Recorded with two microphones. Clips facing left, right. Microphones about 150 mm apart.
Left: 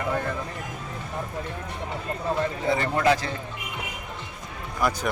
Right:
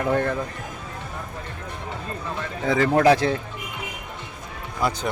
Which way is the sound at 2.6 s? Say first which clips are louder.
Right 6 dB; 90° right.